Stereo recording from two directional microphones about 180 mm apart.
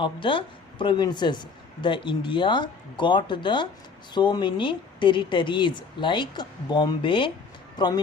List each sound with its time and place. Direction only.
0.0 s speech: 30° left (ahead or behind)